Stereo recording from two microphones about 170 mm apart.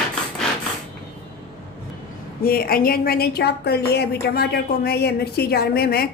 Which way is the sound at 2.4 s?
65° left (ahead or behind).